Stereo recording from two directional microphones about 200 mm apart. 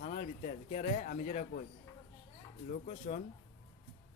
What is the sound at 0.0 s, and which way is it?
Speech, 35° left (ahead or behind).